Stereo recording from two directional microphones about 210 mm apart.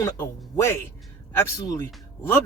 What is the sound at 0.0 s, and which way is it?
Speech, 15° left (ahead or behind).